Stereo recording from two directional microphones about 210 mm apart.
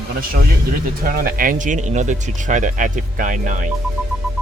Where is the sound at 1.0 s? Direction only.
40° right (ahead or behind).